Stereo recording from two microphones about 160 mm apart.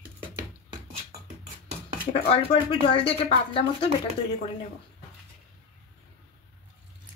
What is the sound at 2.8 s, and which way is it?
Speech, 35° left (ahead or behind).